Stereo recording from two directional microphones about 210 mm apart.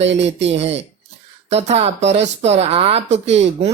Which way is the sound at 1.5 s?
30° right (ahead or behind).